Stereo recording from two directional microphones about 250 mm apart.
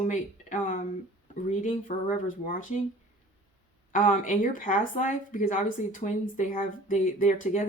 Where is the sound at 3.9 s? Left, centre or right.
Left.